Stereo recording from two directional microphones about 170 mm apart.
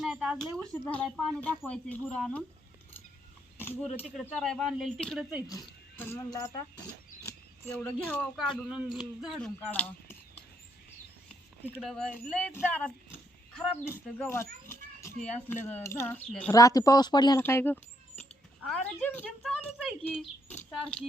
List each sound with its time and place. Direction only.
0.0 s speech: 5° right (ahead or behind)
3.6 s speech: 10° left (ahead or behind)
6.0 s speech: 15° left (ahead or behind)
11.7 s speech: centre (ahead or behind)
16.5 s speech: 20° left (ahead or behind)
17.4 s speech: 15° left (ahead or behind)
18.9 s speech: 10° left (ahead or behind)
19.4 s a sound: 5° left (ahead or behind)
20.7 s speech: centre (ahead or behind)